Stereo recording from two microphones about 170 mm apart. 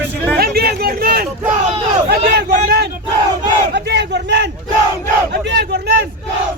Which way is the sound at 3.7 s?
80° right.